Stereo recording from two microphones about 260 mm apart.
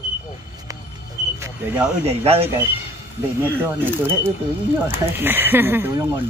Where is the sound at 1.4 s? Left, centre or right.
Centre.